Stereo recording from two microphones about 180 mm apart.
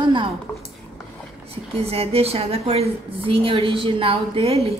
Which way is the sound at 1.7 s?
35° right (ahead or behind).